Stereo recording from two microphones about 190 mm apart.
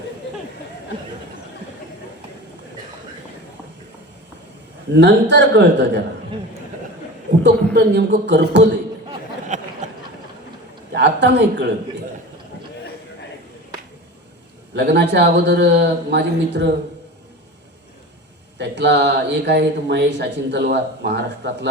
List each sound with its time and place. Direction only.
4.9 s speech: 65° right (ahead or behind)
7.7 s speech: 60° right (ahead or behind)
9.5 s a sound: 40° right (ahead or behind)
10.9 s speech: 65° right (ahead or behind)
14.8 s speech: 60° right (ahead or behind)
18.5 s speech: 65° right (ahead or behind)